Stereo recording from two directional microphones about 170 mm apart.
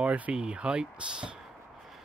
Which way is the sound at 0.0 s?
5° right (ahead or behind).